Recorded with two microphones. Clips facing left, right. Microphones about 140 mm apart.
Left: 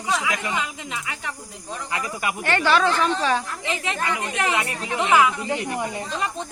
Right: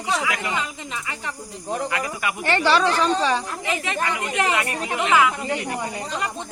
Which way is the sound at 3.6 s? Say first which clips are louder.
Right 2 dB; 20° left (ahead or behind).